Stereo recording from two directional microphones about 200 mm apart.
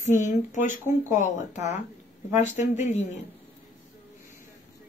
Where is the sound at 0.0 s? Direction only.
40° left (ahead or behind).